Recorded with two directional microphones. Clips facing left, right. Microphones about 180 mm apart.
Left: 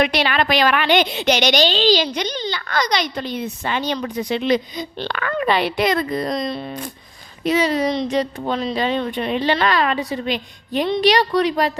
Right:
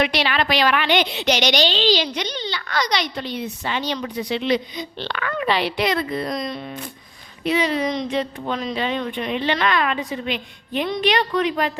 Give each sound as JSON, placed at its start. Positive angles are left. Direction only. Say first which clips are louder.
{"t": 0.0, "sound": "a woman's voice", "louder": "left 2 dB", "side_deg": 50}
{"t": 6.3, "sound": "a woman's voice", "louder": "left 3 dB", "side_deg": 30}
{"t": 7.4, "sound": "a woman's voice", "louder": "left 3 dB", "side_deg": 40}